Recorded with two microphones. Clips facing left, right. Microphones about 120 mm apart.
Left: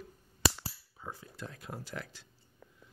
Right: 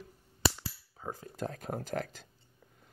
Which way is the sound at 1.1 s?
40° right (ahead or behind).